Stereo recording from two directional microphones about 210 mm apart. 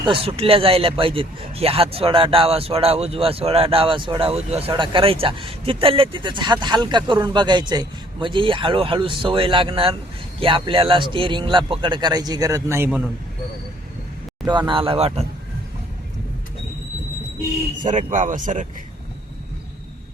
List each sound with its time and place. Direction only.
0.0 s speech: 25° right (ahead or behind)
14.7 s speech: 25° right (ahead or behind)
17.8 s speech: 35° right (ahead or behind)